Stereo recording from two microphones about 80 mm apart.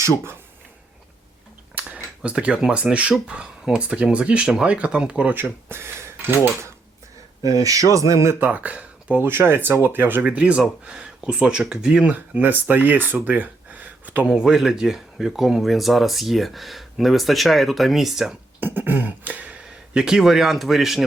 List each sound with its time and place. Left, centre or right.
1.8 s a sound: right
2.2 s speech: centre; by 6.7 s right
7.4 s speech: right
8.4 s speech: right
10.2 s speech: centre
14.3 s speech: centre
18.6 s speech: right; by 21.0 s centre